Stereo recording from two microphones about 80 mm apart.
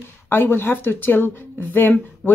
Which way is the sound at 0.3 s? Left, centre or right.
Left.